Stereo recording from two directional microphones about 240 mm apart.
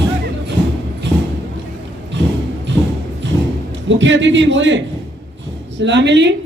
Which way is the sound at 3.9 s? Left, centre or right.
Right.